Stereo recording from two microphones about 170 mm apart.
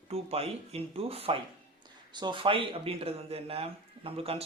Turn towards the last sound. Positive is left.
turn(degrees=-35)  # may be behind; listen again after turning